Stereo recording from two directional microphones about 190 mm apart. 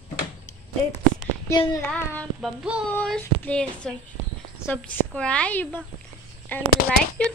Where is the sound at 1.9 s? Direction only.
Centre (ahead or behind).